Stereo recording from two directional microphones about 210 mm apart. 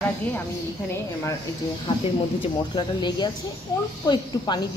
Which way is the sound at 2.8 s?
20° left (ahead or behind).